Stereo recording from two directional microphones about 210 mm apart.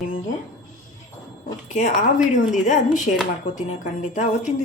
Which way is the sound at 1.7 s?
35° left (ahead or behind).